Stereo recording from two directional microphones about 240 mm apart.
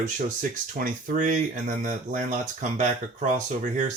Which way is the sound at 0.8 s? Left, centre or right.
Right.